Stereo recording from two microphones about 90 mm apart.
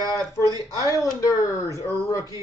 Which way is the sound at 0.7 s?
40° left (ahead or behind).